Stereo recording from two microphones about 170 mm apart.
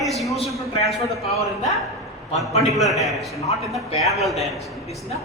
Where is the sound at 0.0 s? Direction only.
Centre (ahead or behind).